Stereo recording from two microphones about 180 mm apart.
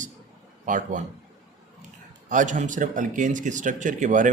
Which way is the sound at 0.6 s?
45° right (ahead or behind).